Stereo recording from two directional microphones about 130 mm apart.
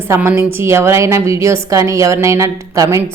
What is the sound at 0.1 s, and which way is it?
A woman's voice, 20° right (ahead or behind).